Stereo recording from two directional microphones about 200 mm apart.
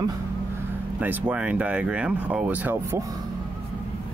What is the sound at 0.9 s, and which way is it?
Speech, 5° right (ahead or behind).